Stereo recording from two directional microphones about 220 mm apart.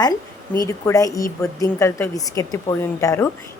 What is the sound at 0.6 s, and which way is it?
Speech, 15° left (ahead or behind).